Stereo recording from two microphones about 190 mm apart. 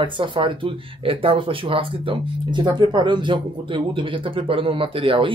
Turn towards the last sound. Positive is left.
turn(degrees=-30)  # may be behind; listen again after turning